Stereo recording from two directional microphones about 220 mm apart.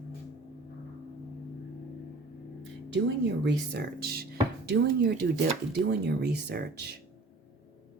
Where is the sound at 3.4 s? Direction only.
50° right (ahead or behind).